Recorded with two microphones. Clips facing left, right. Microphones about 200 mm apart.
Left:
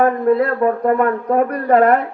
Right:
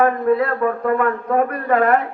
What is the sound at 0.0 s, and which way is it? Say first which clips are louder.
A man's voice: left 2 dB; 40° left (ahead or behind).